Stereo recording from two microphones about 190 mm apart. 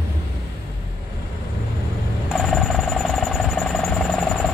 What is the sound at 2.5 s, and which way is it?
Vehicle, centre (ahead or behind).